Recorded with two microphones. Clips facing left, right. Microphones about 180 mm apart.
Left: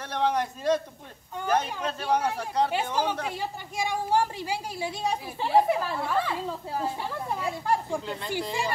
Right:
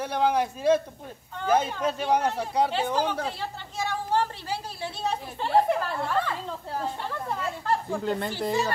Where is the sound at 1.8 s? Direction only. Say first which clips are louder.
Right 2 dB; 15° right (ahead or behind).